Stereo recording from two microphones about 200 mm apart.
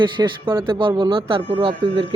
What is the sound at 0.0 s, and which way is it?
Speech, 25° right (ahead or behind).